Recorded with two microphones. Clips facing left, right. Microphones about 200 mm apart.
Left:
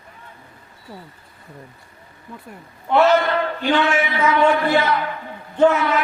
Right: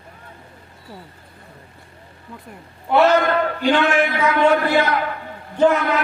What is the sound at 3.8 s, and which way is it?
A man's voice, 50° right (ahead or behind).